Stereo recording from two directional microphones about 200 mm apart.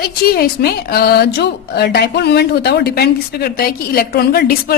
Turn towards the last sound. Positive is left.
turn(degrees=50)  # may be behind; listen again after turning